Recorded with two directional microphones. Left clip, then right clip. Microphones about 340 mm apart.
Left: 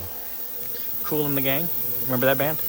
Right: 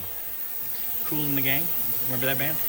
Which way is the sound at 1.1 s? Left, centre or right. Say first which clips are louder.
Left 4 dB; left.